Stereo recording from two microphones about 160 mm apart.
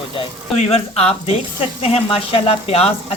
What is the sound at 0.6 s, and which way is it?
Speech, 40° left (ahead or behind).